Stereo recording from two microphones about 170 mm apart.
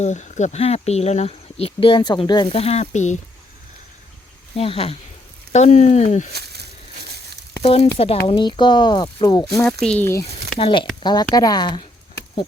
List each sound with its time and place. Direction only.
0.0 s speech: 45° left (ahead or behind)
4.5 s speech: 35° left (ahead or behind)
7.6 s speech: 35° left (ahead or behind); by 9.6 s 20° left (ahead or behind)
9.8 s speech: 10° left (ahead or behind)
10.6 s speech: 30° left (ahead or behind)